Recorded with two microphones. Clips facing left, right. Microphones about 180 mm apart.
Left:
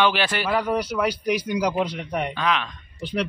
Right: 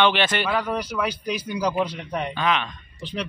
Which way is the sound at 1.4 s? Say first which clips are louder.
Left 1 dB; 15° left (ahead or behind).